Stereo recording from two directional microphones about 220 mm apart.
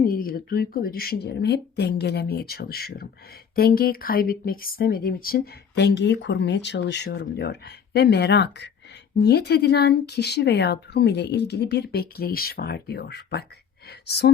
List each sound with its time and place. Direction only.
0.0 s speech: 40° left (ahead or behind)